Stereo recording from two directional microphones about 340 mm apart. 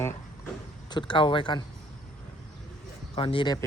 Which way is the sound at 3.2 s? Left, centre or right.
Centre.